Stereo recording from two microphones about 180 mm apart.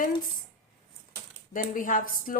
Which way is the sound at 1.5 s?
50° left (ahead or behind).